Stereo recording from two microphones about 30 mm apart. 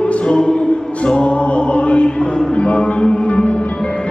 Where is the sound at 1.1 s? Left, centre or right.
Left.